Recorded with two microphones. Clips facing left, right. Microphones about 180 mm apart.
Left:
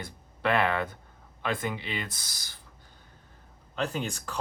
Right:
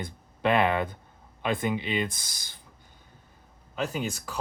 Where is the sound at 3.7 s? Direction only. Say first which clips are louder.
Right 1 dB; 5° right (ahead or behind).